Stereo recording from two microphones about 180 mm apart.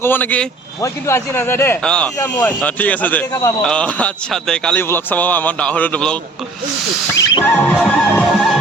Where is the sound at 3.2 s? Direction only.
20° left (ahead or behind).